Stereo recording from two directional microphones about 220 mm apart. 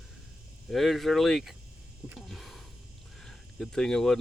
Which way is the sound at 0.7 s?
Centre (ahead or behind).